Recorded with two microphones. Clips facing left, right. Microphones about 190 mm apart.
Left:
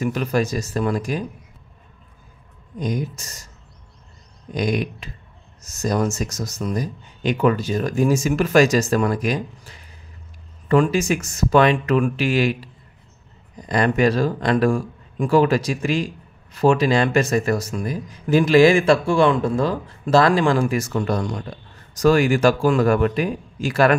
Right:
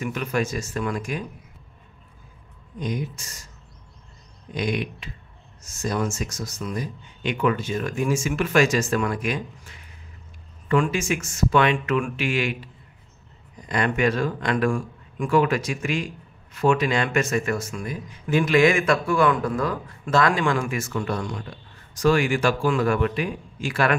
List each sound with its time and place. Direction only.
0.0 s speech: 35° left (ahead or behind)
2.8 s speech: 45° left (ahead or behind)
4.5 s speech: 40° left (ahead or behind)